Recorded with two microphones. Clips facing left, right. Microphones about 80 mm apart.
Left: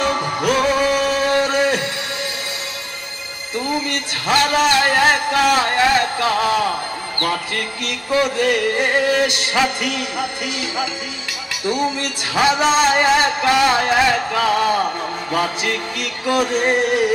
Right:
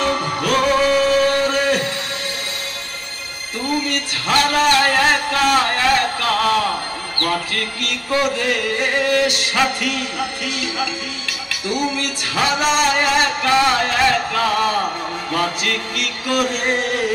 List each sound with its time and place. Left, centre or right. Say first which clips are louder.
0.0 s music: left 1 dB; centre
3.6 s music: right 2 dB; centre
11.7 s music: even; left